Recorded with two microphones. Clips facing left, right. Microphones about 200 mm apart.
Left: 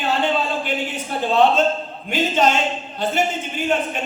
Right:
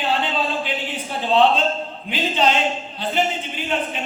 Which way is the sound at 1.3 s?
45° left (ahead or behind).